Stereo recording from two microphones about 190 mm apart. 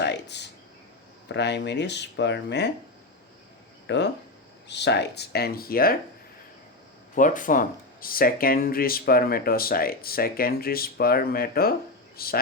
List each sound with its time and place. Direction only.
0.0 s a sound: 60° left (ahead or behind)
1.3 s speech: 65° left (ahead or behind)
3.8 s speech: 65° left (ahead or behind)
7.2 s speech: 45° left (ahead or behind)